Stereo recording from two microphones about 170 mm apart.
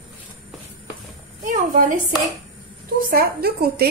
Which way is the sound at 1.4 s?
50° right (ahead or behind).